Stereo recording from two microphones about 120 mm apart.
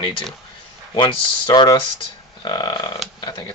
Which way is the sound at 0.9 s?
45° left (ahead or behind).